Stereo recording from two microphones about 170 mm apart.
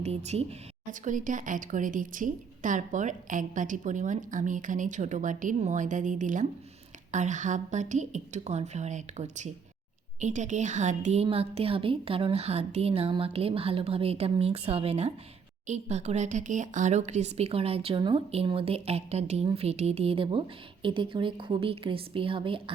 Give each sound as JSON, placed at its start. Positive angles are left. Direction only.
{"t": 0.0, "sound": "a woman's voice", "side_deg": -40}
{"t": 0.9, "sound": "a woman's voice", "side_deg": -50}